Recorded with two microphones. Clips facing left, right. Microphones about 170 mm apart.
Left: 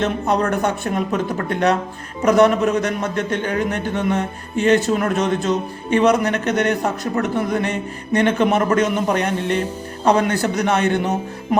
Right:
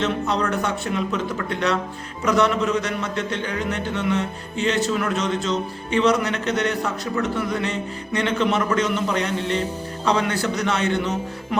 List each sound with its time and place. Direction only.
0.0 s a man's voice: 50° left (ahead or behind)